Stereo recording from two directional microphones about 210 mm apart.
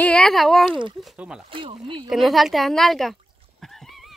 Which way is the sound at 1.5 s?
25° right (ahead or behind).